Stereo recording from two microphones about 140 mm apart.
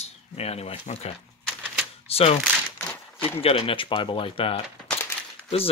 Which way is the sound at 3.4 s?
40° left (ahead or behind).